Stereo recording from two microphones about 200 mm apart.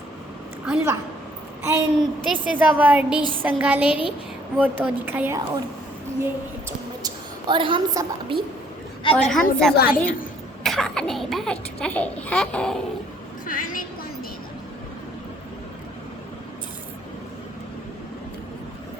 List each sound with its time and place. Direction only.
1.6 s a woman's voice: 15° right (ahead or behind)
6.7 s a woman's voice: 20° right (ahead or behind)
9.1 s a child's voice: centre (ahead or behind)
9.7 s a woman's voice: 50° left (ahead or behind)
10.6 s a child's voice: centre (ahead or behind)
13.5 s a woman's voice: 45° left (ahead or behind)